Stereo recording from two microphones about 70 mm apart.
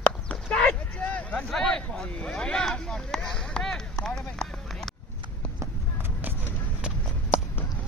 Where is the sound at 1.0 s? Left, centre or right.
Left.